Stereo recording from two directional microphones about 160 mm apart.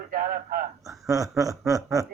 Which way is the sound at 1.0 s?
20° right (ahead or behind).